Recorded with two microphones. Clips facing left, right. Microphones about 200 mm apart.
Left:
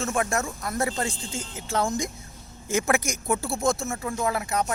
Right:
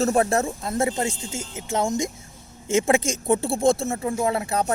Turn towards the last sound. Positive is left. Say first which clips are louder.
# right 3 dB
turn(degrees=-30)  # may be behind; listen again after turning